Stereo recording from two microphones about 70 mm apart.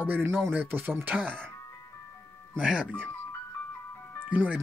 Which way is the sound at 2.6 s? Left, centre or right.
Centre.